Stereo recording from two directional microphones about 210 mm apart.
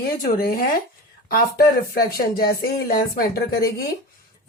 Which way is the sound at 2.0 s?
45° left (ahead or behind).